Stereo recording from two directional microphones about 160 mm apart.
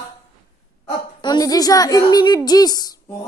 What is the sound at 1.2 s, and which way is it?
A woman's voice, 25° left (ahead or behind).